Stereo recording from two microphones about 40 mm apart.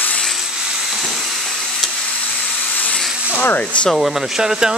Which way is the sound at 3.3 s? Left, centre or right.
Left.